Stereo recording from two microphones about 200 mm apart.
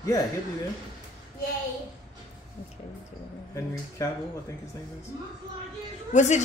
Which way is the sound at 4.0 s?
15° left (ahead or behind).